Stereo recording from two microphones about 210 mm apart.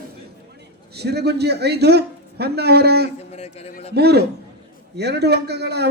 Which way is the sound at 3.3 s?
30° left (ahead or behind).